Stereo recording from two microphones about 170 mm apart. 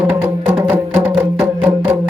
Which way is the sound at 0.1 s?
10° right (ahead or behind).